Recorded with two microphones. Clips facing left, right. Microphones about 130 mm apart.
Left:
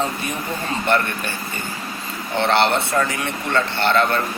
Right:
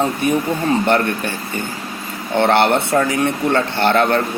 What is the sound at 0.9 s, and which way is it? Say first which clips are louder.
Speech: right 4 dB; 55° right (ahead or behind).